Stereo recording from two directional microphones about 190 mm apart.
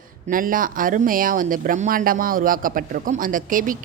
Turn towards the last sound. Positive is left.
turn(degrees=-45)  # may be behind; listen again after turning